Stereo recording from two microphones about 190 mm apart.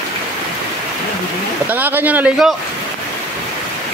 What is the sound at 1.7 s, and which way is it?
Speech, 10° right (ahead or behind).